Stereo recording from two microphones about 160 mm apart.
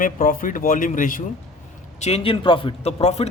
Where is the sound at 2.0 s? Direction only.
40° left (ahead or behind).